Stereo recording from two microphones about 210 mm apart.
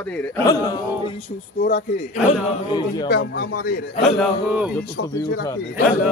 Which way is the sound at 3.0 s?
55° left (ahead or behind).